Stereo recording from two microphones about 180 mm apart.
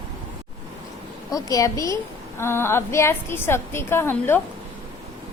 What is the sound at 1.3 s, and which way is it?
A woman's voice, 20° left (ahead or behind).